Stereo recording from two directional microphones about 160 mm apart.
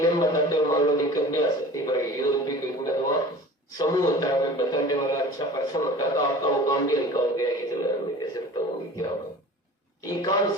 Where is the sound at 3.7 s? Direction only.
25° left (ahead or behind).